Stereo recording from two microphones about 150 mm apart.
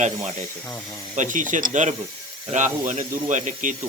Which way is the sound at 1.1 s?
55° right (ahead or behind).